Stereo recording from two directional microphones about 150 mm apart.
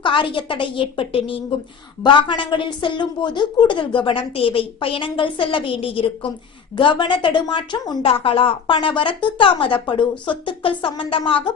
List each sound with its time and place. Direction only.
0.0 s a woman's voice: 35° left (ahead or behind)